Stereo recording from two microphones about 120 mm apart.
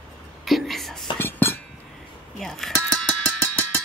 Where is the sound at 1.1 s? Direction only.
20° left (ahead or behind).